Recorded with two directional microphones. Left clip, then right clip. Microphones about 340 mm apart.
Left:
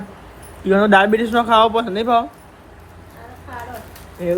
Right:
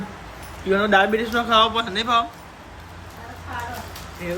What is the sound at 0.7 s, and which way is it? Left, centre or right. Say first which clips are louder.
Speech: left 4 dB; centre.